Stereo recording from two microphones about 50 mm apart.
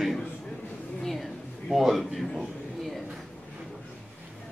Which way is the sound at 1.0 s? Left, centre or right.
Centre.